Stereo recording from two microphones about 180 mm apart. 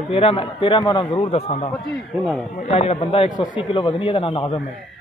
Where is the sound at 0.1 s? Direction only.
30° left (ahead or behind).